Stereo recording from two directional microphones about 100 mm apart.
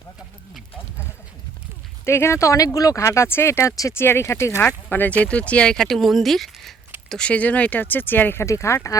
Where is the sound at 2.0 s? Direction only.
25° left (ahead or behind).